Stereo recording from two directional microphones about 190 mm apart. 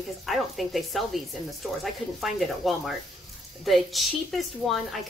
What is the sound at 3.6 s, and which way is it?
Speech, centre (ahead or behind).